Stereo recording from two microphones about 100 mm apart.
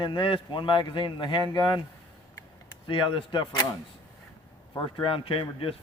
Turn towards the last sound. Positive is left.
turn(degrees=65)  # may be behind; listen again after turning